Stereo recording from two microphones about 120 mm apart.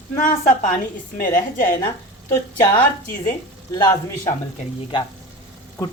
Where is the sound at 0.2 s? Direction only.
90° left.